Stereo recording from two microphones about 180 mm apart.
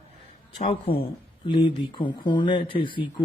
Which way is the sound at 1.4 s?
25° left (ahead or behind).